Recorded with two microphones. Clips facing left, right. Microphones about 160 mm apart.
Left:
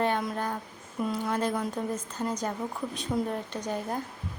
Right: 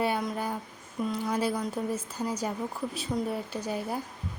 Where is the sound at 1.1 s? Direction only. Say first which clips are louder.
Even; 5° right (ahead or behind).